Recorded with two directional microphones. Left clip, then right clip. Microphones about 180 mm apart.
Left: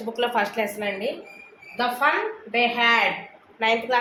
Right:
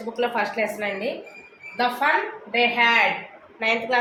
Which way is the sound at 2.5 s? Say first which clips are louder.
Right 1 dB; 35° left (ahead or behind).